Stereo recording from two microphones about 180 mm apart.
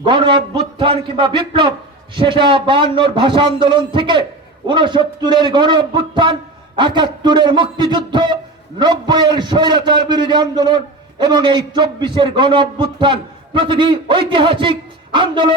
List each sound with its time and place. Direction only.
0.0 s a man's voice: 25° right (ahead or behind)